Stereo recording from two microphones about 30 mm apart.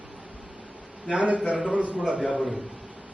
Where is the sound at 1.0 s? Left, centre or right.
Right.